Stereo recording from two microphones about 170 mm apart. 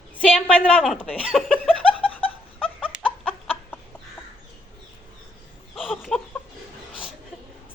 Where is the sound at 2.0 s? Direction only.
30° left (ahead or behind).